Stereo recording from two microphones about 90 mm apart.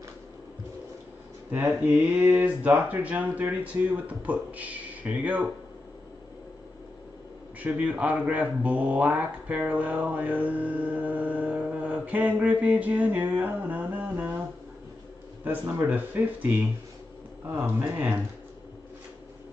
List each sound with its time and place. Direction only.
1.7 s speech: 15° right (ahead or behind)
7.6 s speech: 15° right (ahead or behind)
15.4 s speech: 20° right (ahead or behind)